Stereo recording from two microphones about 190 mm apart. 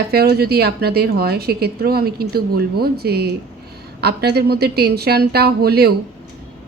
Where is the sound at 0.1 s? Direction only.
55° right (ahead or behind).